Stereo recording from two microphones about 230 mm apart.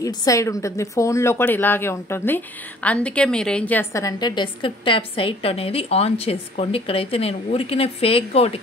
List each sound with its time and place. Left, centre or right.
0.0 s a woman's voice: centre